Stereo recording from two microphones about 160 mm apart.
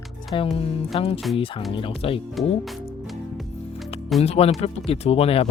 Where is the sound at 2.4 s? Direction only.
Centre (ahead or behind).